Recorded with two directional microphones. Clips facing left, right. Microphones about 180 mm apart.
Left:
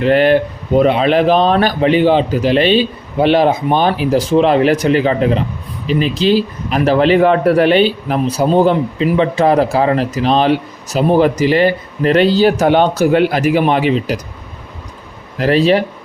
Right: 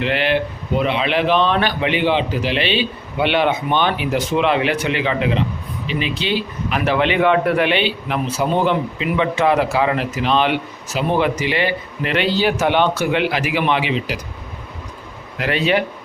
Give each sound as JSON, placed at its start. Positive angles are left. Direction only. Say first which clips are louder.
{"t": 0.0, "sound": "speech", "louder": "left 8 dB", "side_deg": 45}
{"t": 15.4, "sound": "speech", "louder": "left 7 dB", "side_deg": 35}